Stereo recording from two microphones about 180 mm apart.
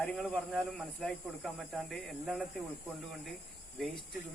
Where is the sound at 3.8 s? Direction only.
Centre (ahead or behind).